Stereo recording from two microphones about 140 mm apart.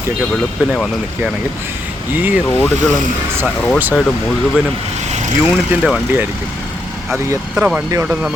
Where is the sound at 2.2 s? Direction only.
15° right (ahead or behind).